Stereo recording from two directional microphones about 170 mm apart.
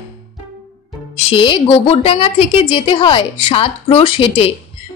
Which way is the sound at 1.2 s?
30° left (ahead or behind).